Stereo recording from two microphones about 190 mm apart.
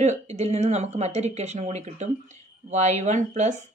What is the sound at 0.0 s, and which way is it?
A woman's voice, 35° right (ahead or behind).